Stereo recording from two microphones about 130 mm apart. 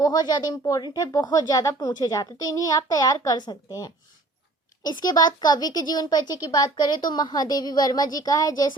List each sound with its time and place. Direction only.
0.0 s speech: 30° left (ahead or behind)